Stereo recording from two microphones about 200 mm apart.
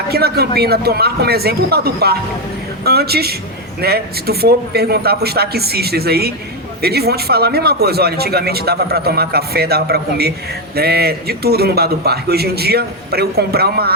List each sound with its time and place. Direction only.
0.1 s a man's voice: 50° right (ahead or behind)